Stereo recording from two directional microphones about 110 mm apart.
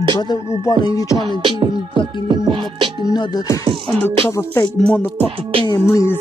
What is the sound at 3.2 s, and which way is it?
Music, 35° left (ahead or behind).